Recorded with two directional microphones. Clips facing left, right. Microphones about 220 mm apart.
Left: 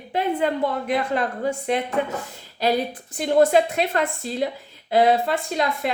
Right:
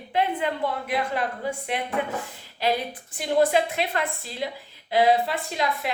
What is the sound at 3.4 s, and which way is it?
A woman's voice, 45° left (ahead or behind).